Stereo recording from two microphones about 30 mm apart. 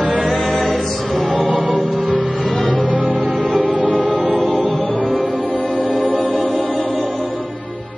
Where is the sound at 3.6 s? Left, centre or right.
Left.